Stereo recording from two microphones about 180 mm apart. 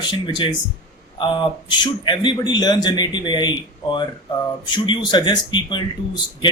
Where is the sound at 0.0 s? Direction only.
25° left (ahead or behind).